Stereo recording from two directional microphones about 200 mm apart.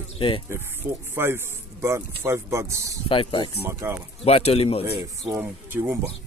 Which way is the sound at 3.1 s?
25° left (ahead or behind).